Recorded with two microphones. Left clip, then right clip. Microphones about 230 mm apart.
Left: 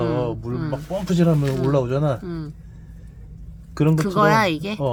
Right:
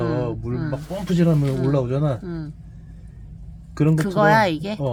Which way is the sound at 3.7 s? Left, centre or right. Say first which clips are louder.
Left 1 dB; centre.